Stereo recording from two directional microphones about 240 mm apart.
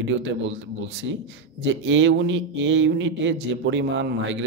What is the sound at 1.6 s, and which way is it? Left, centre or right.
Speech, right.